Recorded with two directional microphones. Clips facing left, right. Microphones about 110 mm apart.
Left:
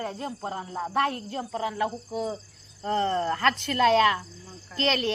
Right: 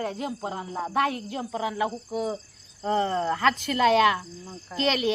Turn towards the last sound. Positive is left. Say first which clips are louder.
# right 1 dB
turn(degrees=-5)  # may be behind; listen again after turning